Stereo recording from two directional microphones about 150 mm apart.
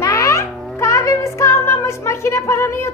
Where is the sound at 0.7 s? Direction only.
20° left (ahead or behind).